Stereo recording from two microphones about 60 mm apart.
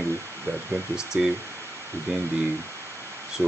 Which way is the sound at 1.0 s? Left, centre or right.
Centre.